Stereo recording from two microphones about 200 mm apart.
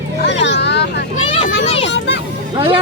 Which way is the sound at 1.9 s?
60° left (ahead or behind).